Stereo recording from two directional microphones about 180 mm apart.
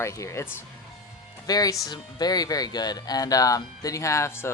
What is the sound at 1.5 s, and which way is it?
Speech, 20° left (ahead or behind).